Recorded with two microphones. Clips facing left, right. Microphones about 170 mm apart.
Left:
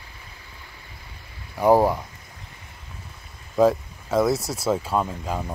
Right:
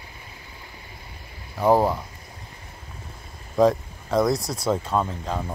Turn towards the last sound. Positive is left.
turn(degrees=10)  # may be behind; listen again after turning